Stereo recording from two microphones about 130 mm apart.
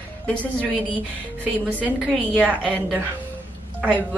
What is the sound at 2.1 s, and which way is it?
Speech, centre (ahead or behind).